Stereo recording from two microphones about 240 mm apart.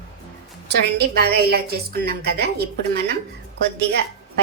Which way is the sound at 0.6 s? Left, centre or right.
Right.